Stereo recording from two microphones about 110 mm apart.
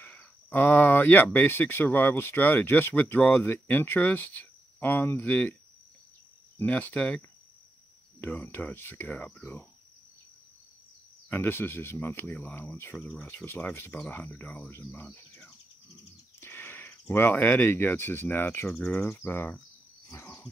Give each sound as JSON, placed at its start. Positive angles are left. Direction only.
{"t": 0.0, "sound": "speech", "side_deg": 15}
{"t": 6.6, "sound": "speech", "side_deg": 15}
{"t": 11.2, "sound": "speech", "side_deg": 20}
{"t": 12.9, "sound": "speech", "side_deg": 10}
{"t": 14.8, "sound": "speech", "side_deg": 25}
{"t": 15.0, "sound": "bird", "side_deg": 15}
{"t": 16.3, "sound": "speech", "side_deg": 20}
{"t": 20.1, "sound": "dog", "side_deg": 25}